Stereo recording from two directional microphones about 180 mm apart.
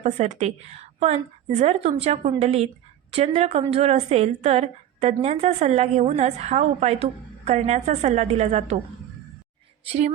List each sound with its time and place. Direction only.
0.0 s a woman's voice: 40° right (ahead or behind)
9.8 s a woman's voice: 35° right (ahead or behind)